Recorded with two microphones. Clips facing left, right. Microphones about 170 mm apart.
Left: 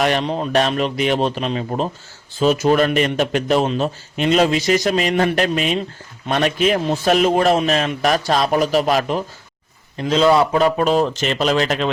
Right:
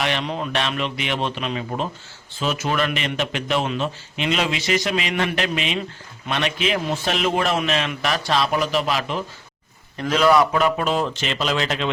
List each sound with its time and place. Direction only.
0.0 s a man's voice: 40° left (ahead or behind)
10.0 s a man's voice: 25° left (ahead or behind); by 11.9 s 45° left (ahead or behind)